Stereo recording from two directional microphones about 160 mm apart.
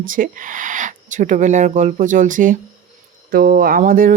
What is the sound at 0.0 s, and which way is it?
Speech, 60° right (ahead or behind).